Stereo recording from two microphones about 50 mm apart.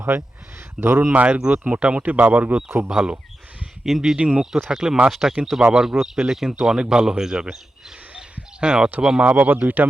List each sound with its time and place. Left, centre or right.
0.1 s speech: right
1.1 s speech: right
2.6 s speech: right
2.9 s speech: centre
9.2 s speech: right